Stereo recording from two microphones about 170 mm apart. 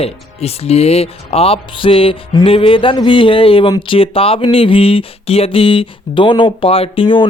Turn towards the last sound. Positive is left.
turn(degrees=30)  # may be behind; listen again after turning